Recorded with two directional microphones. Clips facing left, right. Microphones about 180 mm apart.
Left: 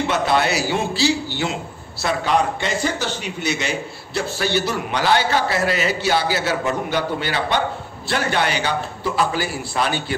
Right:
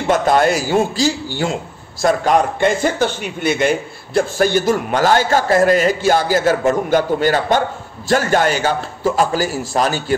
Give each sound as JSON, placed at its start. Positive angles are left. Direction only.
{"t": 0.1, "sound": "a man's voice", "side_deg": -45}